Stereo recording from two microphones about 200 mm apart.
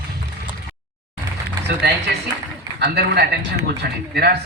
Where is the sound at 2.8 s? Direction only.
55° right (ahead or behind).